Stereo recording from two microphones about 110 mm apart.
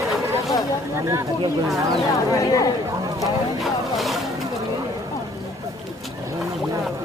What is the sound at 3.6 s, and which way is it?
Vehicle, centre (ahead or behind).